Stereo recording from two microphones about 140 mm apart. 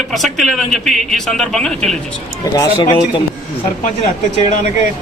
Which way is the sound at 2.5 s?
25° left (ahead or behind).